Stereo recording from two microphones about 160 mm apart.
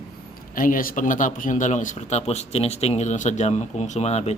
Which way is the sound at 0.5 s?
60° left (ahead or behind).